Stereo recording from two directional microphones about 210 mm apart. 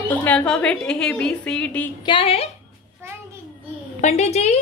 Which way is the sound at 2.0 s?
25° left (ahead or behind).